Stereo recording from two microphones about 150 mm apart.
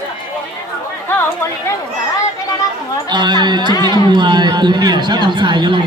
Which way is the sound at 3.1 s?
30° right (ahead or behind).